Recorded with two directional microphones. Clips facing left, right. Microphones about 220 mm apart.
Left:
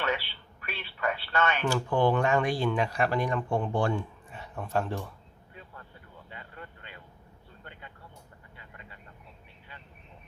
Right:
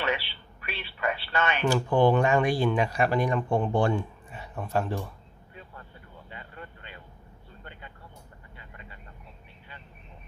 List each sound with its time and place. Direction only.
0.6 s speech: 10° right (ahead or behind)
4.3 s a sound: 5° right (ahead or behind)
6.6 s vehicle: 25° right (ahead or behind)